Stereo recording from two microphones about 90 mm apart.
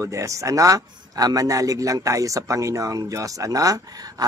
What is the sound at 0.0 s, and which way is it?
Speech, 35° right (ahead or behind).